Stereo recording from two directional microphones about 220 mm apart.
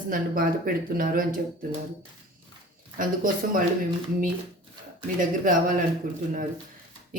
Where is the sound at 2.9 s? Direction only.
40° right (ahead or behind).